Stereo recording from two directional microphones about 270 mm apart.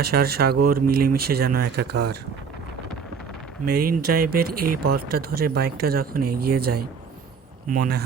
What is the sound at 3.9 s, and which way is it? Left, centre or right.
Speech, right.